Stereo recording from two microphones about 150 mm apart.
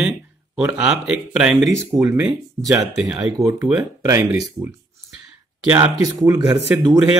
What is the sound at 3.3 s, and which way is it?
Speech, 20° right (ahead or behind).